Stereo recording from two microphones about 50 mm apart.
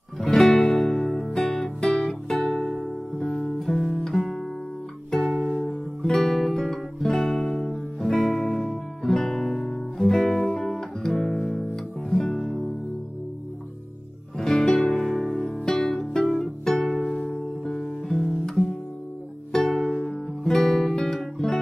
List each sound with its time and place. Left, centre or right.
0.4 s music: centre
3.8 s guitar: centre
4.1 s guitar: centre
6.1 s music: centre
14.4 s music: centre